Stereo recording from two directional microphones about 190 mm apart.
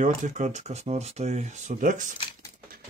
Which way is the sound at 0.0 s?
40° right (ahead or behind).